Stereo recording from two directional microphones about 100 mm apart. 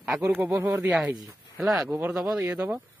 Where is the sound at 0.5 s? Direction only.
25° right (ahead or behind).